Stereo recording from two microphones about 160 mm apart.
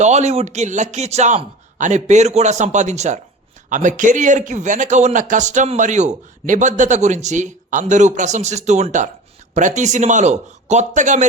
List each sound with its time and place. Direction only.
0.0 s a man's voice: 45° right (ahead or behind)